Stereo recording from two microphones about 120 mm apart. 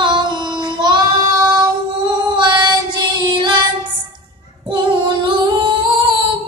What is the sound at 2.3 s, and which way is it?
Child singing, 40° right (ahead or behind).